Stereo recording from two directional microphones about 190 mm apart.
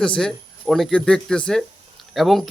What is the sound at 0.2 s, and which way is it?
Speech, centre (ahead or behind).